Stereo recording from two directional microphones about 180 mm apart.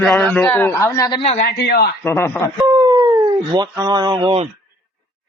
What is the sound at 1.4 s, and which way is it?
Speech, 60° left (ahead or behind).